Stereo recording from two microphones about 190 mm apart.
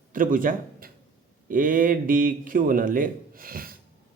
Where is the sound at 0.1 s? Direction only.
45° right (ahead or behind).